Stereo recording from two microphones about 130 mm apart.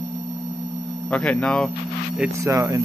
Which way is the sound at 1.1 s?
10° left (ahead or behind).